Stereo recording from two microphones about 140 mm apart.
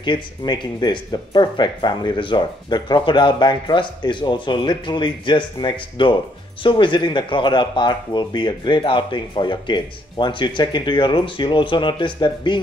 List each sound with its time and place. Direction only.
0.0 s speech: 30° left (ahead or behind)